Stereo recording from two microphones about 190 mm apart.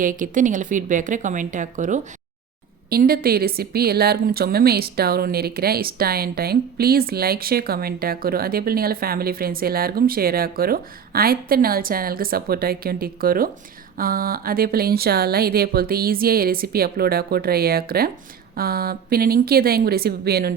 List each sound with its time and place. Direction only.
0.0 s a woman's voice: 45° right (ahead or behind)